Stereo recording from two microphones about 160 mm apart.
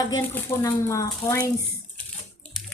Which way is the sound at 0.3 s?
20° left (ahead or behind).